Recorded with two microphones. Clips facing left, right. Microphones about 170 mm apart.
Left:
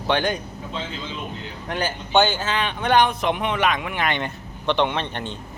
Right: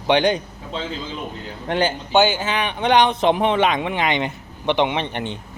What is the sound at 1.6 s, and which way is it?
Speech, 25° right (ahead or behind).